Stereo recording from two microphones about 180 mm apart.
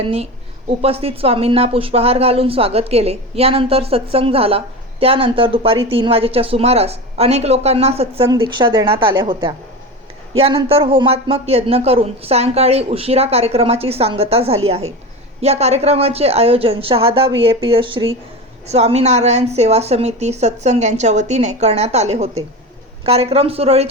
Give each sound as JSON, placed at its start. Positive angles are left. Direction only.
{"t": 0.0, "sound": "a woman's voice", "side_deg": -30}